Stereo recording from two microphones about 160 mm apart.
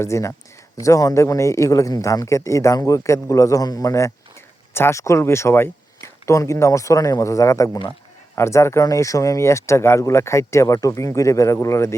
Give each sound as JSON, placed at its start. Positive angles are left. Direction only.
{"t": 0.0, "sound": "speech", "side_deg": 15}